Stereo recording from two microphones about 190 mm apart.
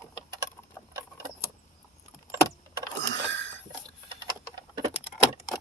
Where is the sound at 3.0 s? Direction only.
70° right (ahead or behind).